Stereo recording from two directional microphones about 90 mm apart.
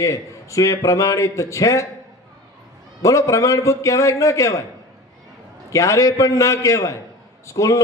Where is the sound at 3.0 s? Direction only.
35° left (ahead or behind).